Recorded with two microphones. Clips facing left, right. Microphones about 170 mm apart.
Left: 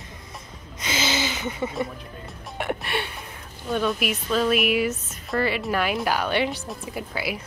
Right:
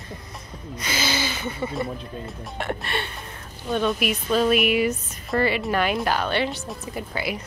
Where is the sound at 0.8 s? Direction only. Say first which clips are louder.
Left 1 dB; 20° left (ahead or behind).